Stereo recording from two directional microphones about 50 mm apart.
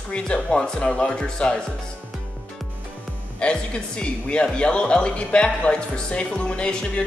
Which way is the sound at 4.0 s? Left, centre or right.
Left.